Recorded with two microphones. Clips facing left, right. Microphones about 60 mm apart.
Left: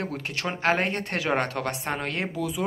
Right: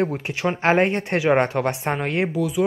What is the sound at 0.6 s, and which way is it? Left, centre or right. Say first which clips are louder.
Speech: right 6 dB; right.